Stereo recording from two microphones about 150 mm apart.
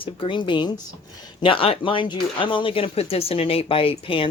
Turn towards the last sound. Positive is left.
turn(degrees=35)  # may be behind; listen again after turning